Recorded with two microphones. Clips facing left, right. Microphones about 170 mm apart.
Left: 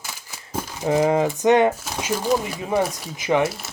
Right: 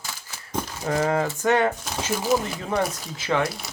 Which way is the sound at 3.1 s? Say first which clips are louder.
Left 5 dB; 15° left (ahead or behind).